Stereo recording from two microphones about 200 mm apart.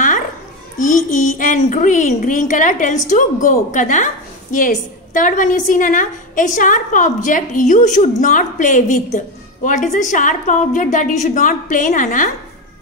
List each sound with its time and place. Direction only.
0.7 s a woman's voice: 40° left (ahead or behind)